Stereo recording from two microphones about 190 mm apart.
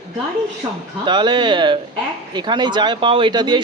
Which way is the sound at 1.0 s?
25° right (ahead or behind).